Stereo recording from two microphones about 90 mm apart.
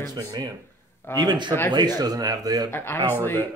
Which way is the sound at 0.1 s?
45° right (ahead or behind).